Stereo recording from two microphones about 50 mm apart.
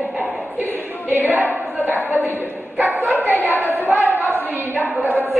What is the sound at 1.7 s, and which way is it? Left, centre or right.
Speech, right.